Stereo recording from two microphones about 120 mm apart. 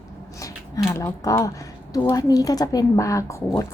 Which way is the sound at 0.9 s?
25° left (ahead or behind).